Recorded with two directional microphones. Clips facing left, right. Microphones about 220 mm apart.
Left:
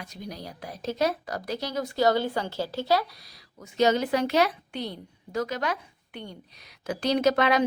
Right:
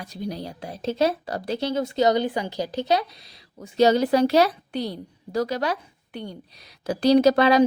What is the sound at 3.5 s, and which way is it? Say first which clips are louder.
A woman's voice: right 4 dB; 30° right (ahead or behind).